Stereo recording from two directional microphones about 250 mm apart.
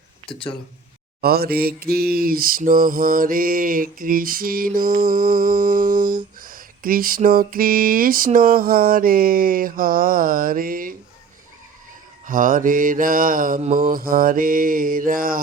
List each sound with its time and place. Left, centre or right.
0.3 s speech: left
1.2 s mantra: right
12.2 s mantra: right